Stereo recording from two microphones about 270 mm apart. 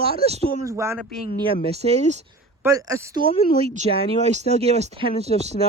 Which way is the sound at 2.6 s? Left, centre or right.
Centre.